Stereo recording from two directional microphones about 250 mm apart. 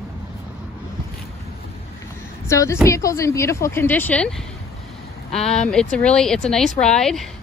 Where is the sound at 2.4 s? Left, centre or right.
Centre.